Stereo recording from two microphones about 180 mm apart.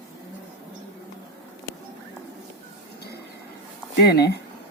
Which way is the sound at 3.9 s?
65° left (ahead or behind).